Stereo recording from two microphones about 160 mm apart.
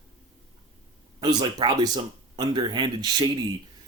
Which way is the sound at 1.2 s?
25° right (ahead or behind).